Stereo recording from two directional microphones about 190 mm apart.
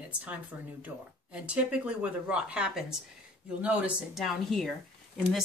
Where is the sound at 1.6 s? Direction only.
5° right (ahead or behind).